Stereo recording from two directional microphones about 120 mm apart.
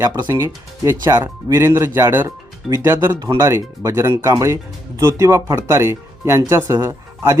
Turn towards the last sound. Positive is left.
turn(degrees=-25)  # may be behind; listen again after turning